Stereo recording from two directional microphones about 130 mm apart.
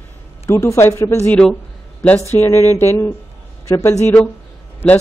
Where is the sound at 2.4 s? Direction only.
20° left (ahead or behind).